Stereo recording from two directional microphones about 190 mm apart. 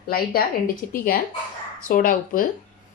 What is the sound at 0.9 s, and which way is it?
Speech, 50° left (ahead or behind).